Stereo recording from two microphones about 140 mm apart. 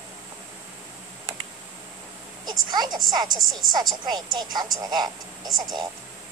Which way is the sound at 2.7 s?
30° right (ahead or behind).